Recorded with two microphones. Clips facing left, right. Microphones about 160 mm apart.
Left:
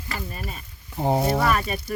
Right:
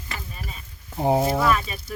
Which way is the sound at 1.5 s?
45° left (ahead or behind).